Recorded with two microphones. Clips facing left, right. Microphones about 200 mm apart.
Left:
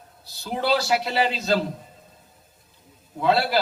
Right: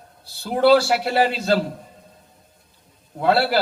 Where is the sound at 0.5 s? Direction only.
50° right (ahead or behind).